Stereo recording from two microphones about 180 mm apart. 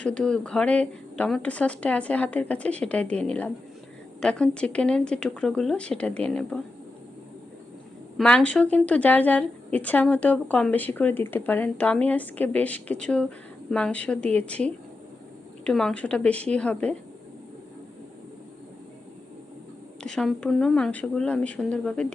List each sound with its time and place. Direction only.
0.0 s a woman's voice: 5° left (ahead or behind)
8.2 s a woman's voice: 5° left (ahead or behind)
20.0 s speech: 5° left (ahead or behind)